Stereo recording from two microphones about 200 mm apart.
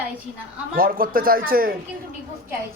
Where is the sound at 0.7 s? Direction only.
45° right (ahead or behind).